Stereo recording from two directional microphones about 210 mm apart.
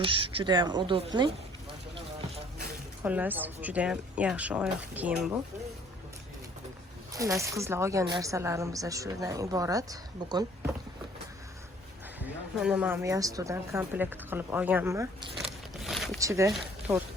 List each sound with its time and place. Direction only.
0.0 s a woman's voice: 25° right (ahead or behind)
3.0 s speech: 10° right (ahead or behind)
7.1 s speech: 15° right (ahead or behind)
12.2 s speech: 5° right (ahead or behind)
15.4 s biting: centre (ahead or behind)
16.2 s speech: 15° right (ahead or behind)